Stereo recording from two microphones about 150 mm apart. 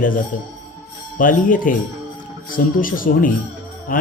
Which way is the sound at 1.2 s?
65° left (ahead or behind).